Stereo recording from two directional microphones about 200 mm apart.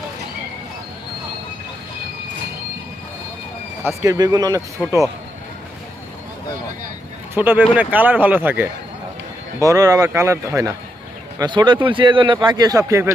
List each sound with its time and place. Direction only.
3.8 s speech: 15° right (ahead or behind)
7.3 s speech: 10° right (ahead or behind)